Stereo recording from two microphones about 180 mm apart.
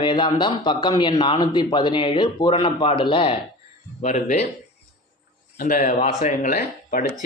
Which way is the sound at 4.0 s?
45° left (ahead or behind).